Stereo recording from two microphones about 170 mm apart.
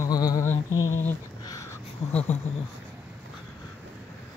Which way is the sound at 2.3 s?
40° left (ahead or behind).